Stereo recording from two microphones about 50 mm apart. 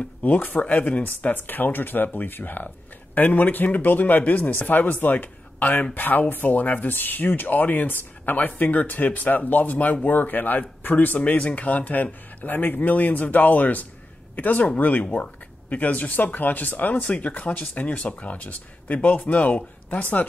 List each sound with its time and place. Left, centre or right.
0.2 s speech: left
1.3 s speech: left